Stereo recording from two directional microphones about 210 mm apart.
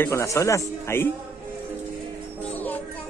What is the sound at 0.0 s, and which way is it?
A man's voice, 15° left (ahead or behind).